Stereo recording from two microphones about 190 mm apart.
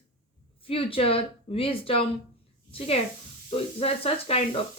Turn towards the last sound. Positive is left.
turn(degrees=30)  # may be behind; listen again after turning